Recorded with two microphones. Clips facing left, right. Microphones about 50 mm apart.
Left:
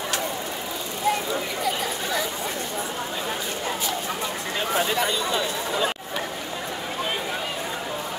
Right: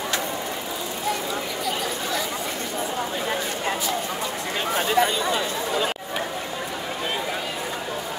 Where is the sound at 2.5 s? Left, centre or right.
Right.